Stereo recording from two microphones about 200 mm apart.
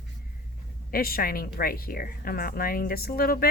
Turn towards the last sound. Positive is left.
turn(degrees=45)  # may be behind; listen again after turning